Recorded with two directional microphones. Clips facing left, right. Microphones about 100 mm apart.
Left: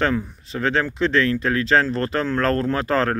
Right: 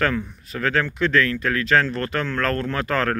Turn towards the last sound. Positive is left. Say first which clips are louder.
# left 3 dB
turn(degrees=30)  # may be behind; listen again after turning